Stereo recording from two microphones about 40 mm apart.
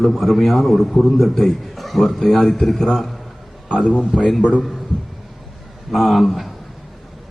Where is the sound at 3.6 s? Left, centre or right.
Centre.